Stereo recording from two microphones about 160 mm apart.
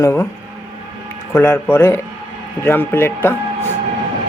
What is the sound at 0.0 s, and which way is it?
Speech, 15° left (ahead or behind).